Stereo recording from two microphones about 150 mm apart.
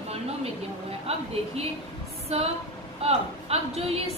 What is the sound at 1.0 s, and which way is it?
A woman's voice, 45° right (ahead or behind).